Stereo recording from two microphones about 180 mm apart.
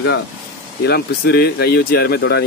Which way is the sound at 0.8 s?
60° left (ahead or behind).